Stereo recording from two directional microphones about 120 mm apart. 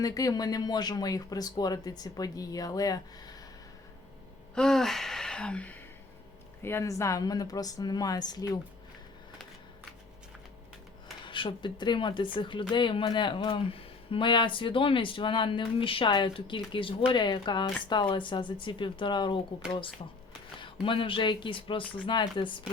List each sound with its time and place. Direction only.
0.0 s speech: 30° left (ahead or behind)
4.5 s gasp: 5° left (ahead or behind)
6.6 s speech: 20° left (ahead or behind)
11.3 s speech: 45° left (ahead or behind)